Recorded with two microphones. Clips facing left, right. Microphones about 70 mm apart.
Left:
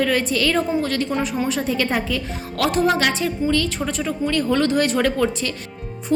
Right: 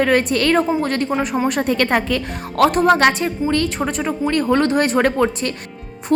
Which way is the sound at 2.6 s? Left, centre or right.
Right.